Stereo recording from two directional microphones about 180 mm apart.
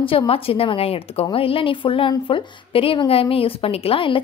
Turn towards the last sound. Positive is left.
turn(degrees=30)  # may be behind; listen again after turning